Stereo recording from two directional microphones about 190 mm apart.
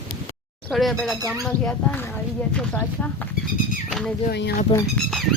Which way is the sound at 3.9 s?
Centre (ahead or behind).